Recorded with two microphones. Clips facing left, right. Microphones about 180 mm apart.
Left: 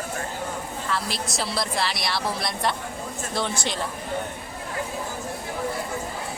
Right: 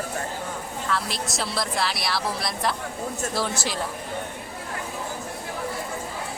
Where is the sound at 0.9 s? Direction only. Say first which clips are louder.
Right 1 dB; centre (ahead or behind).